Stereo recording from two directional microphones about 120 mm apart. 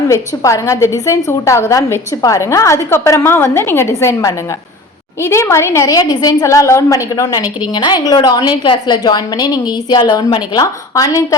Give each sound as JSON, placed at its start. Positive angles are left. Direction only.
{"t": 0.1, "sound": "a woman's voice", "side_deg": 25}
{"t": 10.9, "sound": "a woman's voice", "side_deg": 30}